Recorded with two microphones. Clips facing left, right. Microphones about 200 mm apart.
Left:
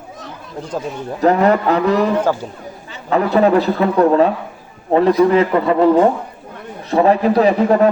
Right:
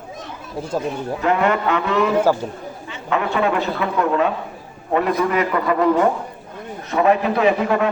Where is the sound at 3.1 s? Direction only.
35° left (ahead or behind).